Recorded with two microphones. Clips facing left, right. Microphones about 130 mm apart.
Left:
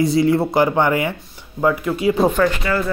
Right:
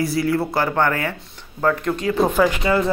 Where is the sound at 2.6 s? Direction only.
20° right (ahead or behind).